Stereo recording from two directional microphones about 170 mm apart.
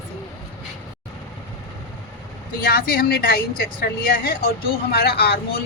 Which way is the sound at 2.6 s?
60° left (ahead or behind).